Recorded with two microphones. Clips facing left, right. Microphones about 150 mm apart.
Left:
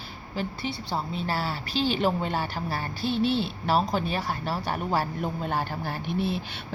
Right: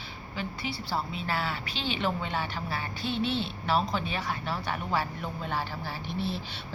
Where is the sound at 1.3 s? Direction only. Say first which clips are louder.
Left 2 dB; 35° left (ahead or behind).